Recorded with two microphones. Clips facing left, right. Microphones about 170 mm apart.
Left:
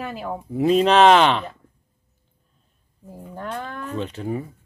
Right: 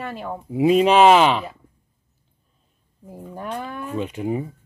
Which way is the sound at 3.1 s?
10° right (ahead or behind).